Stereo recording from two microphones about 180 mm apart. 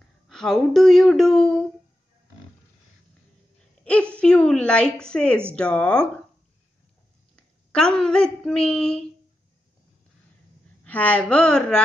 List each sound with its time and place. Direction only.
0.3 s speech: centre (ahead or behind)
3.8 s a sound: 5° left (ahead or behind)
4.9 s speech: 5° left (ahead or behind)
7.3 s speech: 5° left (ahead or behind)
10.8 s speech: 10° left (ahead or behind)